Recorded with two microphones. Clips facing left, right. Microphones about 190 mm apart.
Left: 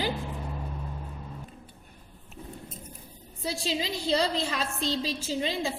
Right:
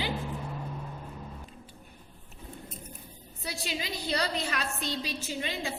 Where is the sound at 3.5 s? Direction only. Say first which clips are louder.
Left 5 dB; 30° left (ahead or behind).